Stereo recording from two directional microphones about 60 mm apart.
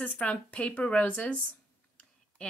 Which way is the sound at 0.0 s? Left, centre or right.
Left.